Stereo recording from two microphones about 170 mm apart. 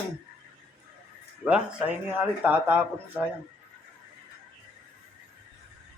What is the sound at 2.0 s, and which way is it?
Speech, 10° right (ahead or behind).